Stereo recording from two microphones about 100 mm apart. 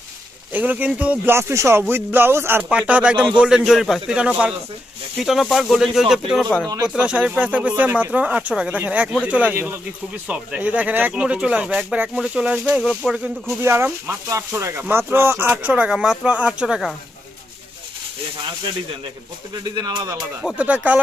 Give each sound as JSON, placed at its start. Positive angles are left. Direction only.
{"t": 0.5, "sound": "speech", "side_deg": -15}
{"t": 2.6, "sound": "speech", "side_deg": -10}
{"t": 13.6, "sound": "speech", "side_deg": -25}
{"t": 15.7, "sound": "speech", "side_deg": -10}
{"t": 19.7, "sound": "speech", "side_deg": -45}
{"t": 20.4, "sound": "speech", "side_deg": -10}